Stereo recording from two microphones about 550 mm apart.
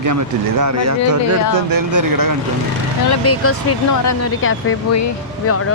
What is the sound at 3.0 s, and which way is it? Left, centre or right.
Speech, left.